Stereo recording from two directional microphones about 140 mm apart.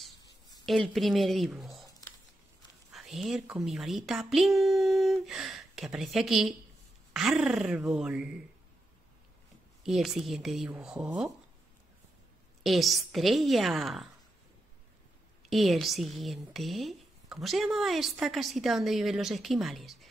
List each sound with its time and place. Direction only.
0.7 s speech: centre (ahead or behind)
2.9 s speech: centre (ahead or behind)
9.8 s speech: centre (ahead or behind)
12.6 s speech: centre (ahead or behind)
15.4 s speech: centre (ahead or behind)